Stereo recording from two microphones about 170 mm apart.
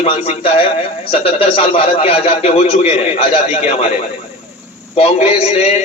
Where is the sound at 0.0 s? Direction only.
35° left (ahead or behind).